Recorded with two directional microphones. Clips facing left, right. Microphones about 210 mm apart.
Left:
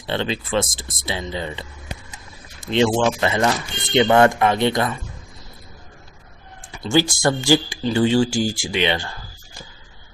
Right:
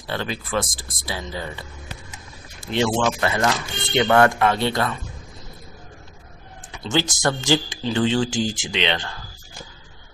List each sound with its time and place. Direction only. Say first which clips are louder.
0.1 s speech: left 3 dB; 25° left (ahead or behind)
6.9 s speech: left 4 dB; 10° left (ahead or behind)